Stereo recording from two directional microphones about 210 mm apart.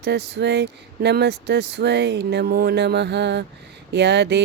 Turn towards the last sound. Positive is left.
turn(degrees=-55)  # may be behind; listen again after turning